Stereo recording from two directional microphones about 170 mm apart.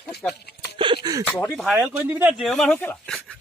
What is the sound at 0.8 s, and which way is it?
Speech, 25° right (ahead or behind).